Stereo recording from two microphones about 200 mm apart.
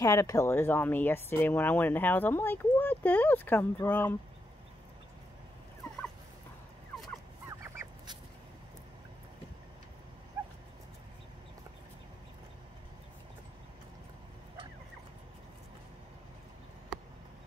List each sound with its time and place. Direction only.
0.0 s speech: 15° left (ahead or behind)
10.4 s dog: 15° right (ahead or behind)